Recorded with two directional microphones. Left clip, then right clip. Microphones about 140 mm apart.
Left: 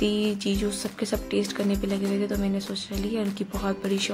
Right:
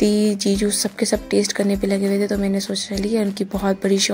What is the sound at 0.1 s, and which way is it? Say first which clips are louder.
Speech: right 7 dB; 45° right (ahead or behind).